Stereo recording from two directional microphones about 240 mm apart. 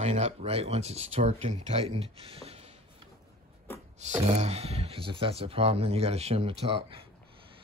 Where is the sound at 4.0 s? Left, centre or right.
Right.